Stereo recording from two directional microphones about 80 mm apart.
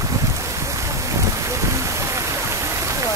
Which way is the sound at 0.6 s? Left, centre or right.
Right.